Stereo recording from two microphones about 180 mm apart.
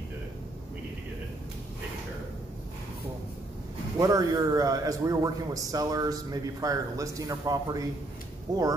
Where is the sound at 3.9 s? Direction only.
20° right (ahead or behind).